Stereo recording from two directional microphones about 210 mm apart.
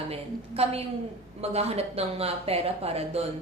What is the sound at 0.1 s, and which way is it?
A woman's voice, 30° right (ahead or behind).